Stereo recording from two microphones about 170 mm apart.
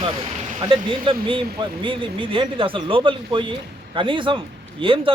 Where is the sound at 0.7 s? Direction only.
30° right (ahead or behind).